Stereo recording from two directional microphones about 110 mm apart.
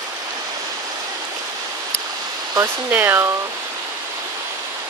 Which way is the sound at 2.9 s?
20° right (ahead or behind).